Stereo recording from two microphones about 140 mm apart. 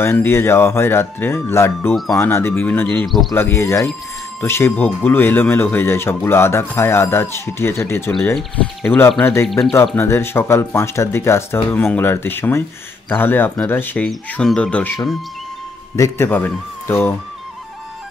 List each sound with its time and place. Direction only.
0.0 s speech: 15° left (ahead or behind)
3.1 s speech: centre (ahead or behind)
3.3 s speech: 15° left (ahead or behind)